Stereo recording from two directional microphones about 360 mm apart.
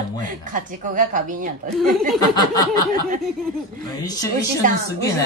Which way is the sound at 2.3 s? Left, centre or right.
Centre.